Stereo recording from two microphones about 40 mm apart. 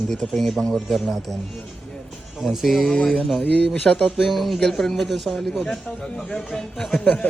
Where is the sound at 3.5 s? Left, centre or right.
Left.